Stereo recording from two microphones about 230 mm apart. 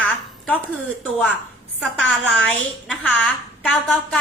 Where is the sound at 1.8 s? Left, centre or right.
Centre.